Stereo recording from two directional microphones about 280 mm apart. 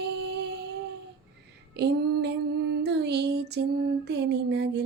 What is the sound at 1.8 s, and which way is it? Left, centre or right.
Child singing, right.